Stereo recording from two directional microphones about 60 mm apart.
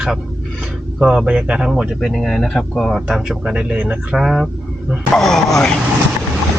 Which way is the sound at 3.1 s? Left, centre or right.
Centre.